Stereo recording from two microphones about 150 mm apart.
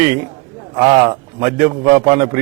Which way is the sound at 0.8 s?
20° right (ahead or behind).